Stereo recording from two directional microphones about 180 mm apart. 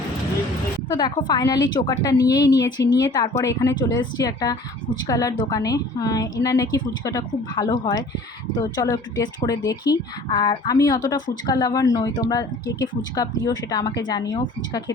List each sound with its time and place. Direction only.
0.9 s speech: 25° left (ahead or behind)